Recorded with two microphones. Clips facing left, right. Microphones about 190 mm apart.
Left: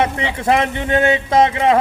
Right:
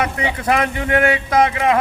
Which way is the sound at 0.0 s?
25° left (ahead or behind).